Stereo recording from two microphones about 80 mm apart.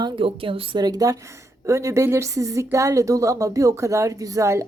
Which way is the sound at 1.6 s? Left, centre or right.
Right.